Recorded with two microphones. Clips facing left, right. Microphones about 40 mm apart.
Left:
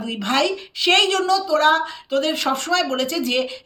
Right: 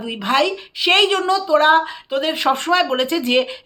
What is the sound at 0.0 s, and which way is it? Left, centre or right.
A woman's voice, centre.